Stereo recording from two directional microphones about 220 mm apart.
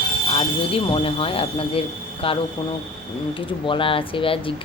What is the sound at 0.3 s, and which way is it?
Speech, 25° left (ahead or behind).